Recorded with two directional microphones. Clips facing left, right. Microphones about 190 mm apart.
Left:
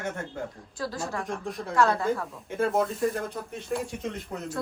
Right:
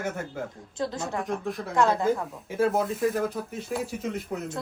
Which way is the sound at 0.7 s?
20° right (ahead or behind).